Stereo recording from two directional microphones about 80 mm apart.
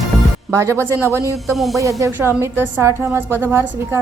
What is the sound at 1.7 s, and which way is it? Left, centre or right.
Speech, right.